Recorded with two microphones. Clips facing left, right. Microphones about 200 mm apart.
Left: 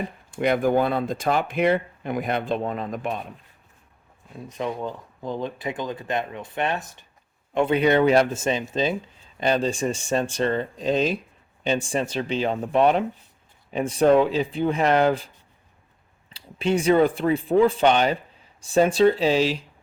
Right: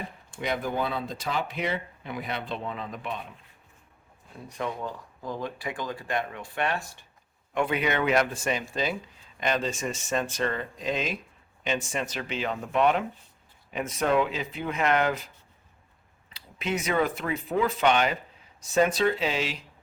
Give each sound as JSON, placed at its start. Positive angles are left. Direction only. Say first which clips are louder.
{"t": 0.3, "sound": "speech", "louder": "left 9 dB", "side_deg": 55}
{"t": 4.4, "sound": "speech", "louder": "left 4 dB", "side_deg": 20}
{"t": 16.3, "sound": "speech", "louder": "left 8 dB", "side_deg": 30}